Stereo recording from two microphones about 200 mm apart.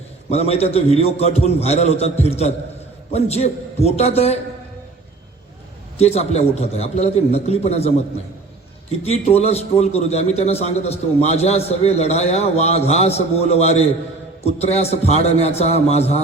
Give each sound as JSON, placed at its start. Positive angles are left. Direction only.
{"t": 0.3, "sound": "a man's voice", "side_deg": 30}
{"t": 6.0, "sound": "a man's voice", "side_deg": 30}